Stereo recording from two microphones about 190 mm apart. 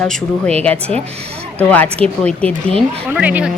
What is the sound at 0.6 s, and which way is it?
Speech, 5° left (ahead or behind).